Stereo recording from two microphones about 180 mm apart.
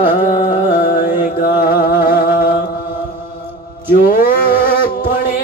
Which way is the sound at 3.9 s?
55° left (ahead or behind).